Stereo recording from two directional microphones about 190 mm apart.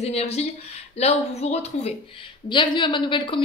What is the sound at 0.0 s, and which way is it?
A woman's voice, 35° left (ahead or behind).